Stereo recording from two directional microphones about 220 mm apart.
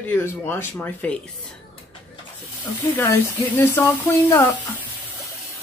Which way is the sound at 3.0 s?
10° left (ahead or behind).